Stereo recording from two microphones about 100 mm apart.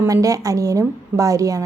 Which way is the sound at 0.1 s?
35° right (ahead or behind).